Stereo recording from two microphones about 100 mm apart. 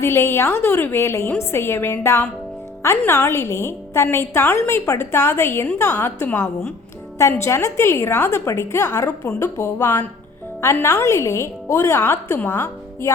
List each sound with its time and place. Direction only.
0.0 s a woman's voice: 25° left (ahead or behind)
7.2 s a woman's voice: 30° left (ahead or behind)
11.0 s a woman's voice: 30° left (ahead or behind)